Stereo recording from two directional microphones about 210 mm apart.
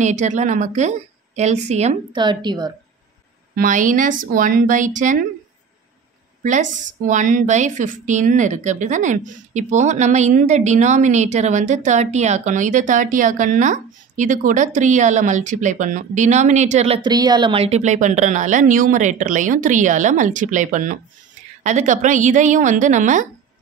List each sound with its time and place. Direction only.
0.0 s a woman's voice: 35° right (ahead or behind)
3.5 s a woman's voice: 40° right (ahead or behind)
6.4 s a woman's voice: 35° right (ahead or behind)